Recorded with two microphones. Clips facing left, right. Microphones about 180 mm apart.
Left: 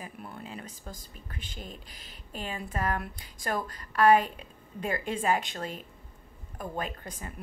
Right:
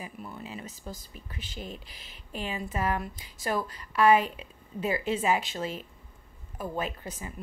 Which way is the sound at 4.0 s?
10° right (ahead or behind).